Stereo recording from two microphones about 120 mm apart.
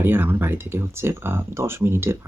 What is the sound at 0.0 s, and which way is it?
Speech, 20° right (ahead or behind).